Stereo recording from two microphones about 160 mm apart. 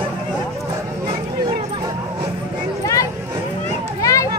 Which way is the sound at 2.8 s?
20° left (ahead or behind).